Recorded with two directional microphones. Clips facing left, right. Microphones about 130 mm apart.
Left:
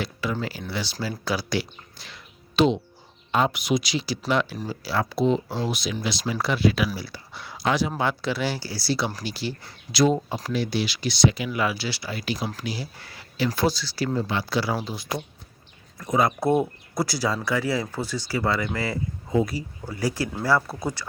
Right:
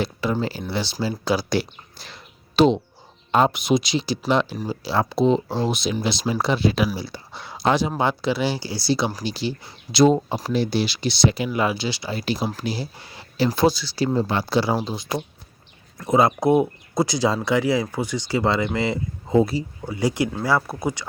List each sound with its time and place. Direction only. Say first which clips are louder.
0.0 s speech: right 5 dB; 30° right (ahead or behind)
12.1 s speech: right 5 dB; 30° right (ahead or behind)
16.4 s speech: right 4 dB; 15° right (ahead or behind)